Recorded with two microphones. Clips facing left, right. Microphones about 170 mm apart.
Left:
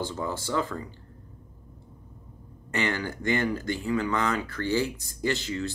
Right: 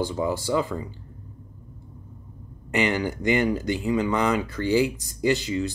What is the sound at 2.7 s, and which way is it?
Speech, 15° right (ahead or behind).